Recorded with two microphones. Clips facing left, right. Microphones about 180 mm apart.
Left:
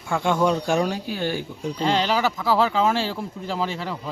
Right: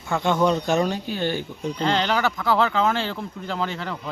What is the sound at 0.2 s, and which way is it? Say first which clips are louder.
Speech: even; 10° left (ahead or behind).